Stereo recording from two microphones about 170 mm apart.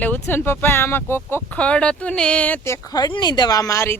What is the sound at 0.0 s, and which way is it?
A woman's voice, 10° left (ahead or behind).